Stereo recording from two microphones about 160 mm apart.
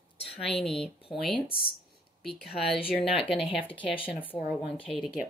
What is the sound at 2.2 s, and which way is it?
Speech, centre (ahead or behind).